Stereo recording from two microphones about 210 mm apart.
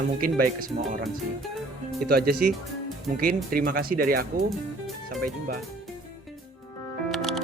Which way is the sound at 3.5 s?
45° right (ahead or behind).